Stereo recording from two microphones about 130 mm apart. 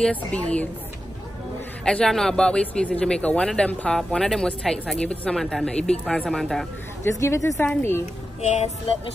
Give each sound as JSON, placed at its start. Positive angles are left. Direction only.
{"t": 0.0, "sound": "speech", "side_deg": 10}
{"t": 1.9, "sound": "speech", "side_deg": 5}
{"t": 7.1, "sound": "a woman's voice", "side_deg": 25}
{"t": 8.4, "sound": "vehicle", "side_deg": 45}